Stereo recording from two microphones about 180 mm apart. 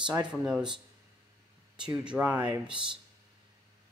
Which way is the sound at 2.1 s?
10° right (ahead or behind).